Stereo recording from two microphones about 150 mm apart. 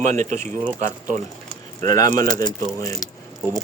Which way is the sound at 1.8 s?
25° left (ahead or behind).